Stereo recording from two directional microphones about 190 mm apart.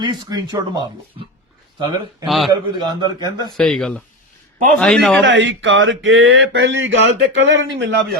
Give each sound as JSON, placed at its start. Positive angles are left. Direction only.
{"t": 0.0, "sound": "a man's voice", "side_deg": -20}
{"t": 2.2, "sound": "a man's voice", "side_deg": 0}
{"t": 2.5, "sound": "a man's voice", "side_deg": -20}
{"t": 3.6, "sound": "a man's voice", "side_deg": 0}
{"t": 5.2, "sound": "a sound", "side_deg": -75}